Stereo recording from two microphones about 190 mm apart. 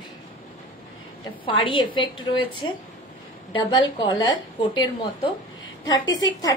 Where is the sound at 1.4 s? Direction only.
25° left (ahead or behind).